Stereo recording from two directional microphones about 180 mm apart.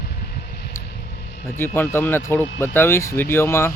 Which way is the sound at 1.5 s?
10° left (ahead or behind).